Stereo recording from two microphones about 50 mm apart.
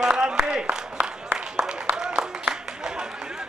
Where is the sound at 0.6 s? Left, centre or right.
Right.